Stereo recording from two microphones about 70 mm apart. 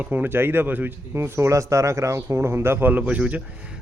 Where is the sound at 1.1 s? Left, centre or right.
Right.